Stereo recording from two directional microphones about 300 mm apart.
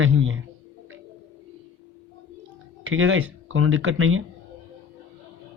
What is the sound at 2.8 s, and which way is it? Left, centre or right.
Speech, right.